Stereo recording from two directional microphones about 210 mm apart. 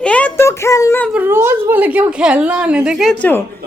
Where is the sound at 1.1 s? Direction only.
10° right (ahead or behind).